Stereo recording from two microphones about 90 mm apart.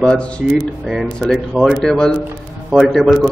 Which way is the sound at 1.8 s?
10° left (ahead or behind).